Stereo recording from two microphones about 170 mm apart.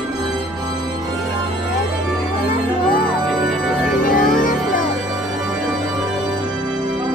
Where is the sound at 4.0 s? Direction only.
55° left (ahead or behind).